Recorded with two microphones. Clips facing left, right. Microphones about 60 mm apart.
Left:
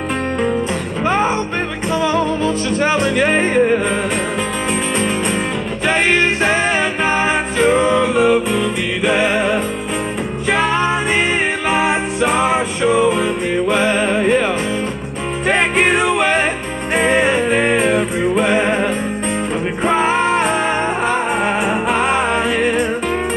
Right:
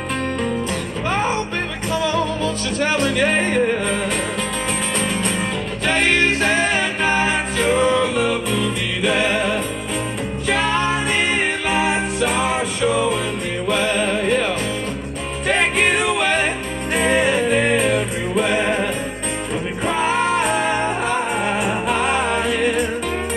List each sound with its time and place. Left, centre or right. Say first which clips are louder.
1.0 s music: left 5 dB; left
15.4 s music: left 3 dB; left